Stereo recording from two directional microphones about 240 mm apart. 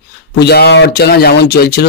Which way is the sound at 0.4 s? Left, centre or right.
Left.